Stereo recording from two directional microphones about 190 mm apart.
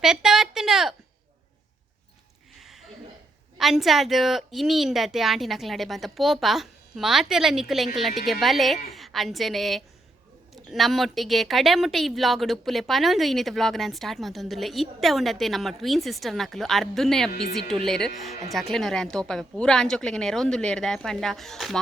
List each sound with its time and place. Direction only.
0.0 s a sound: 5° right (ahead or behind)
2.6 s chuckle: centre (ahead or behind)
3.6 s speech: centre (ahead or behind)